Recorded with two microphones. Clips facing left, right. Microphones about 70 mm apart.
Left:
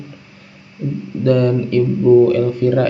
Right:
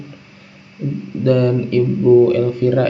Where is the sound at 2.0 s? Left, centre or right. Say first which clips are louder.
Even; centre.